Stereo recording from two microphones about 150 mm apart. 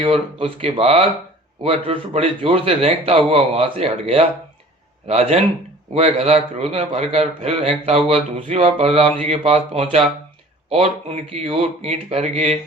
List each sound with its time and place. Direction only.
0.0 s a man's voice: 35° right (ahead or behind)